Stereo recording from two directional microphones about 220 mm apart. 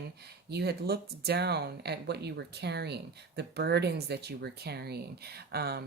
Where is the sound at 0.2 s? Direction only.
45° right (ahead or behind).